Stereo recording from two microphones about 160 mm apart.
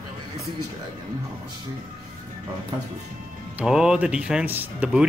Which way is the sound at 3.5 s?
5° right (ahead or behind).